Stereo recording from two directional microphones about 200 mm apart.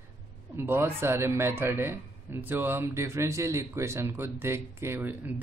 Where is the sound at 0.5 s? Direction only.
10° right (ahead or behind).